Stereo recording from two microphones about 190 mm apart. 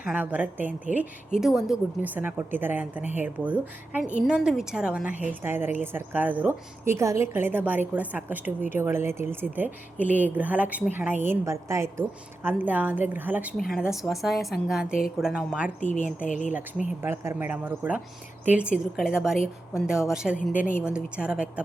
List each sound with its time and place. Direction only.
0.0 s a woman's voice: 5° right (ahead or behind)
15.8 s speech: 40° left (ahead or behind)
16.5 s a woman's voice: 10° right (ahead or behind)